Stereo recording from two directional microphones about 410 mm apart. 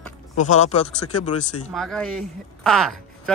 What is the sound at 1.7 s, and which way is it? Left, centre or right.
Speech, centre.